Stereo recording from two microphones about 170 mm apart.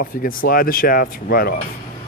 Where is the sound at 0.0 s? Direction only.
55° left (ahead or behind).